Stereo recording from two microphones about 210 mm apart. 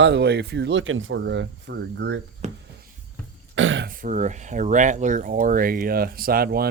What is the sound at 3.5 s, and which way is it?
Throat clearing, 65° right (ahead or behind).